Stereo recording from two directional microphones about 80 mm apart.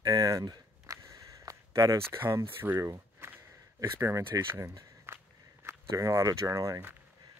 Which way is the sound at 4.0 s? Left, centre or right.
Right.